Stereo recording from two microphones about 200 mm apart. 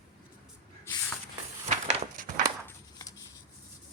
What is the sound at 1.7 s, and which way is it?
Crushing, 35° right (ahead or behind).